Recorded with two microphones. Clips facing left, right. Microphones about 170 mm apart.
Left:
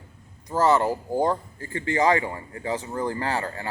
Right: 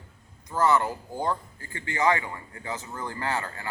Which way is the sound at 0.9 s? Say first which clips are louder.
Left 6 dB; 40° left (ahead or behind).